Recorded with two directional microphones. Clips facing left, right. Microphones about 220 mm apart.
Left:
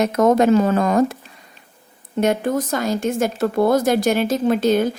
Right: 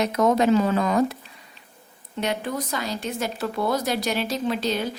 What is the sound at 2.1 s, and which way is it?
A woman's voice, 45° left (ahead or behind).